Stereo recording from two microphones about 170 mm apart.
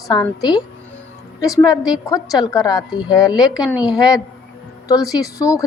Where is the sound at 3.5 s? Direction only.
5° right (ahead or behind).